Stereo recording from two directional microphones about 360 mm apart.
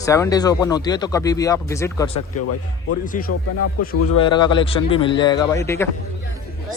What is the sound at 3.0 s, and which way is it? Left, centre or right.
Speech, left.